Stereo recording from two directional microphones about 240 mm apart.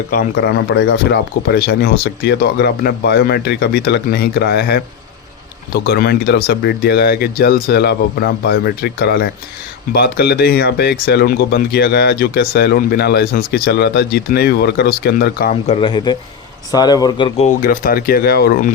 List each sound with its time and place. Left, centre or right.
0.1 s speech: left
15.7 s speech: left